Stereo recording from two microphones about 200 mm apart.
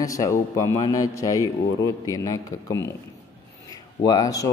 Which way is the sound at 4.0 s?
20° left (ahead or behind).